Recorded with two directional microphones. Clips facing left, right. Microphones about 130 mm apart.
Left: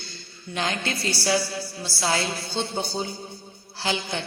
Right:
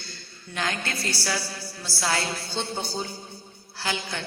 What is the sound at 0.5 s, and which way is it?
A woman's voice, 20° left (ahead or behind).